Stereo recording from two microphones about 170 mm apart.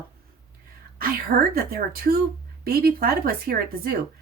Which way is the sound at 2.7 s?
65° right (ahead or behind).